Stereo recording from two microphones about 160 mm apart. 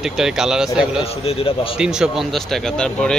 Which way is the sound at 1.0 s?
40° left (ahead or behind).